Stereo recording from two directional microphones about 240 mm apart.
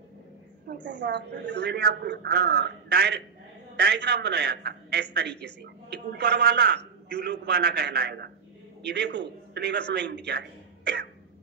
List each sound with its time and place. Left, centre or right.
0.8 s a man's voice: right